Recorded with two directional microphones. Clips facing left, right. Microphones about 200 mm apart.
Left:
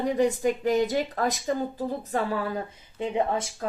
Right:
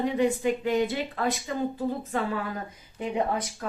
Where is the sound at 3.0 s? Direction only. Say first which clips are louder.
Left 1 dB; 25° left (ahead or behind).